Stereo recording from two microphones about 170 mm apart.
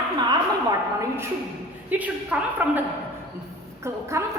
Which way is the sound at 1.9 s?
10° right (ahead or behind).